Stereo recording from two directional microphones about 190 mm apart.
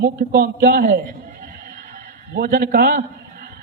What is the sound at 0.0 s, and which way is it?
Speech, 55° right (ahead or behind).